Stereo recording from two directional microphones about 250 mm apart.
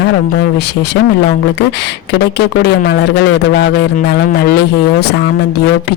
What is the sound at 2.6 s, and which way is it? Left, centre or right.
Speech, left.